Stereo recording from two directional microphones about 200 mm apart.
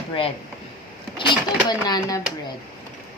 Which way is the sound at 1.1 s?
20° left (ahead or behind).